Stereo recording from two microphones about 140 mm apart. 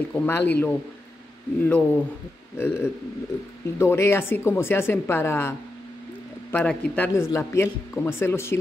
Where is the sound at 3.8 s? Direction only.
20° left (ahead or behind).